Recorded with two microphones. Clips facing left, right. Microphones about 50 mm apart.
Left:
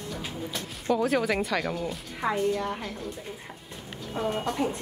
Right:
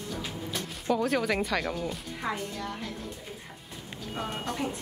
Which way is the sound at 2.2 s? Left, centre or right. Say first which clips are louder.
Left 8 dB; left.